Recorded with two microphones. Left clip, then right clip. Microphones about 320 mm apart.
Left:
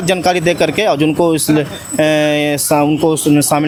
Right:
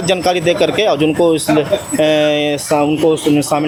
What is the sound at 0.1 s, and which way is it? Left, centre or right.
Speech, left.